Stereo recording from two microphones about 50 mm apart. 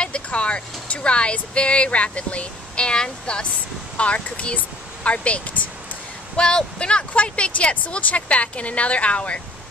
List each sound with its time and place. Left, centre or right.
0.0 s speech: left
6.3 s speech: centre